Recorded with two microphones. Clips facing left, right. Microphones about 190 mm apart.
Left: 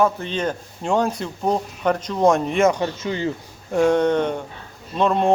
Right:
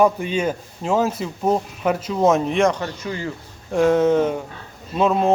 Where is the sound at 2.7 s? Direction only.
20° left (ahead or behind).